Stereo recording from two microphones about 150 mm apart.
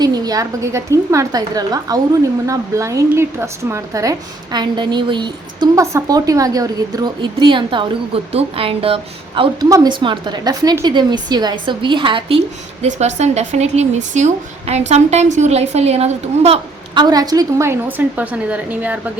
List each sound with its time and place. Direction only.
0.0 s a woman's voice: 25° right (ahead or behind)
12.8 s a woman's voice: 45° right (ahead or behind)
16.9 s a woman's voice: 30° right (ahead or behind); by 18.9 s 10° right (ahead or behind)